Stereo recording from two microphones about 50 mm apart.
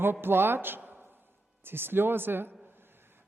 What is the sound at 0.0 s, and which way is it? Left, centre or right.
A man's voice, right.